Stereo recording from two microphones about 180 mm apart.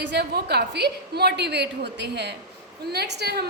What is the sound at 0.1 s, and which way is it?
A woman's voice, 65° right (ahead or behind).